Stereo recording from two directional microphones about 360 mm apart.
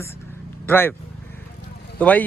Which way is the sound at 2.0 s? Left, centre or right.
Centre.